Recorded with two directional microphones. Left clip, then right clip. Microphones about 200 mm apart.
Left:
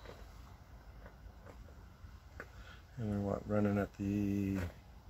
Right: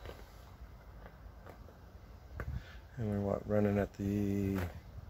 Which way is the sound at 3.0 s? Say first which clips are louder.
Right 3 dB; 15° right (ahead or behind).